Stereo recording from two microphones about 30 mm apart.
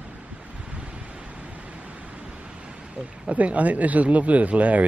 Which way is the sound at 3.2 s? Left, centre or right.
Right.